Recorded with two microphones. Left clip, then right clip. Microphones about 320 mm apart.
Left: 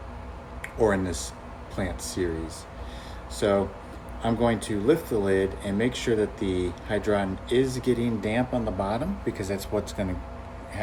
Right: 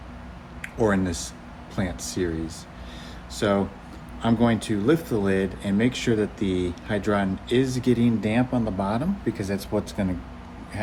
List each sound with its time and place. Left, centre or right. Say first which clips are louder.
0.6 s speech: even; right
3.3 s speech: even; right